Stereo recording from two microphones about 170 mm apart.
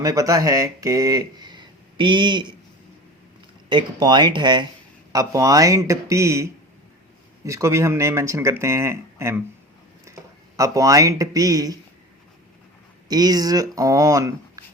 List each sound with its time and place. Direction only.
0.0 s speech: 20° right (ahead or behind)
3.7 s speech: 25° right (ahead or behind)
10.6 s speech: 20° right (ahead or behind)
13.1 s speech: 25° right (ahead or behind)